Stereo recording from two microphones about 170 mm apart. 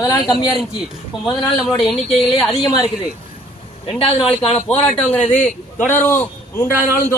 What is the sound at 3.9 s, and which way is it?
Speech, 35° left (ahead or behind).